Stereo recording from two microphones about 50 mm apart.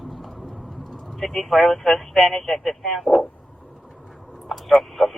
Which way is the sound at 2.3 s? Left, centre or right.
Centre.